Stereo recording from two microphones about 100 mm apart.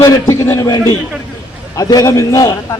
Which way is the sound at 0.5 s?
40° left (ahead or behind).